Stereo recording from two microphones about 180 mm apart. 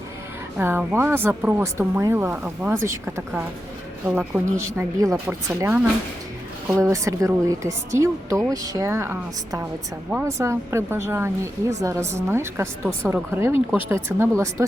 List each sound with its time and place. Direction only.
0.5 s speech: 10° right (ahead or behind)